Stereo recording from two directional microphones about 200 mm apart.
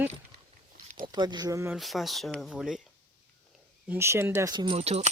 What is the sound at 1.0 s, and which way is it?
Speech, 20° right (ahead or behind).